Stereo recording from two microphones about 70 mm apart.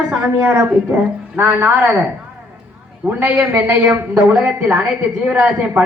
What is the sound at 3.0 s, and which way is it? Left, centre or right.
A woman's voice, right.